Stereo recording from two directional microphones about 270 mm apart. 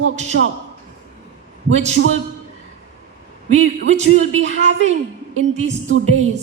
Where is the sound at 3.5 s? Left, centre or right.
Right.